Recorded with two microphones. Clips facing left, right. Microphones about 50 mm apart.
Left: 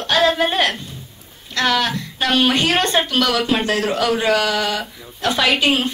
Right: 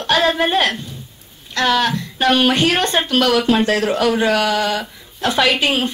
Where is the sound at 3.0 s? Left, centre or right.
Right.